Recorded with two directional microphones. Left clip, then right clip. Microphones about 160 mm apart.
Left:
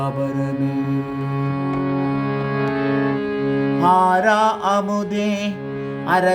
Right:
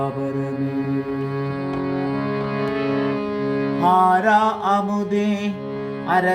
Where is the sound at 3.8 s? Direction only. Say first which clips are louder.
Left 1 dB; 25° left (ahead or behind).